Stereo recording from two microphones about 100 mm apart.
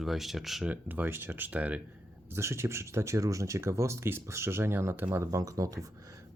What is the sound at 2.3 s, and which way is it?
Speech, 25° right (ahead or behind).